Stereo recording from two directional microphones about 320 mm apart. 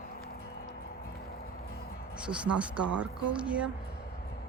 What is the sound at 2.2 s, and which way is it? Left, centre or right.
Speech, centre.